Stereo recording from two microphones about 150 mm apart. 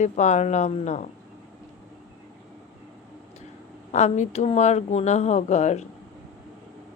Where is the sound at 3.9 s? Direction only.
50° left (ahead or behind).